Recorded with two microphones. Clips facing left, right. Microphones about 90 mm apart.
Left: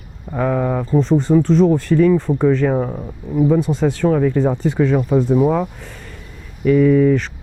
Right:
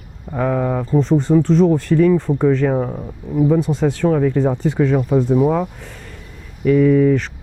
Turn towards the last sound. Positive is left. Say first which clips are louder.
# even
turn(degrees=20)  # may be behind; listen again after turning